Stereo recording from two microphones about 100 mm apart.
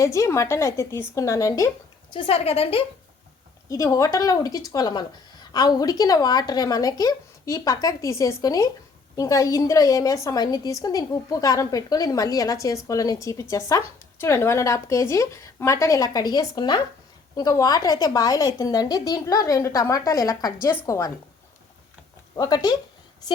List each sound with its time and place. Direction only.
0.0 s a woman's voice: 30° left (ahead or behind)
2.1 s speech: 70° left (ahead or behind)
3.7 s a woman's voice: 35° left (ahead or behind)
22.4 s a woman's voice: 40° left (ahead or behind)